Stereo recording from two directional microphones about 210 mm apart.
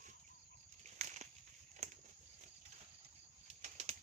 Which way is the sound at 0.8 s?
35° right (ahead or behind).